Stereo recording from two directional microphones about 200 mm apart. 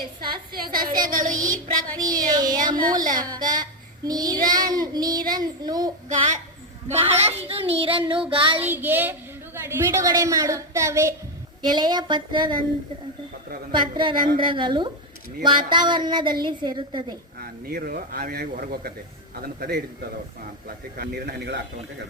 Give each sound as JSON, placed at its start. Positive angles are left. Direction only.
{"t": 1.0, "sound": "a sound", "side_deg": -40}
{"t": 2.0, "sound": "child singing", "side_deg": -20}
{"t": 6.1, "sound": "a sound", "side_deg": -40}
{"t": 6.8, "sound": "child singing", "side_deg": -30}
{"t": 8.6, "sound": "a woman's voice", "side_deg": -10}
{"t": 11.6, "sound": "child singing", "side_deg": -20}
{"t": 13.7, "sound": "child singing", "side_deg": -25}
{"t": 17.4, "sound": "a man's voice", "side_deg": -50}